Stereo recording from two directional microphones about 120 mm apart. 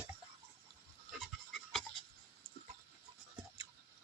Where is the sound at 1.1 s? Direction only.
Centre (ahead or behind).